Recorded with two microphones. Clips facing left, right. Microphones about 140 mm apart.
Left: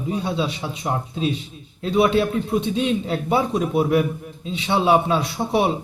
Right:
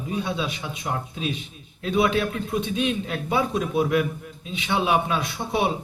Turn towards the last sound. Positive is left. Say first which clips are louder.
# left 4 dB
turn(degrees=30)  # may be behind; listen again after turning